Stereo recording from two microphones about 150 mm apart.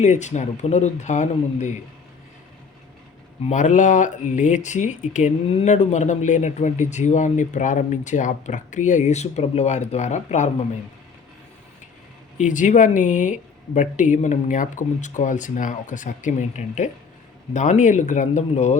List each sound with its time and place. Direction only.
0.0 s speech: 50° left (ahead or behind)
3.4 s speech: 55° left (ahead or behind)
12.4 s speech: 55° left (ahead or behind)